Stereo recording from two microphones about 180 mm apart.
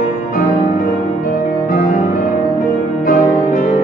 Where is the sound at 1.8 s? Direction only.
45° left (ahead or behind).